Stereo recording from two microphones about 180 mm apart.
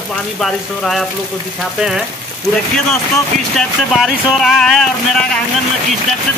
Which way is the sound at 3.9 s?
Centre (ahead or behind).